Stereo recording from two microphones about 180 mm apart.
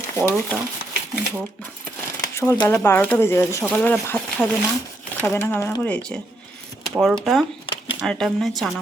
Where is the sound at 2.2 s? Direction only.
15° left (ahead or behind).